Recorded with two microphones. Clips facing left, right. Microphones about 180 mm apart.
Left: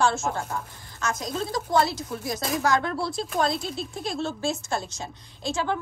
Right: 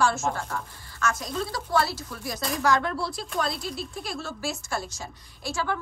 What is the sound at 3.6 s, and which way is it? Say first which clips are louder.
A woman's voice: left 2 dB; 25° left (ahead or behind).